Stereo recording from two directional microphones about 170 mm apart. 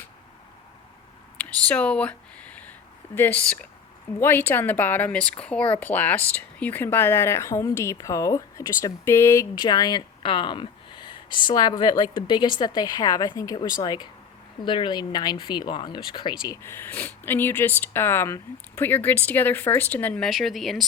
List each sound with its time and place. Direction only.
1.4 s a sound: 10° left (ahead or behind)
3.2 s speech: 10° left (ahead or behind)
16.6 s speech: 10° left (ahead or behind)